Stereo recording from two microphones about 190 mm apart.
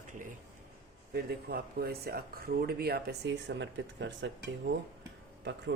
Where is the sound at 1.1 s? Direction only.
55° right (ahead or behind).